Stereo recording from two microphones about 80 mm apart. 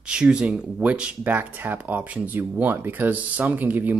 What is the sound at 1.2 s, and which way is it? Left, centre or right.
Speech, right.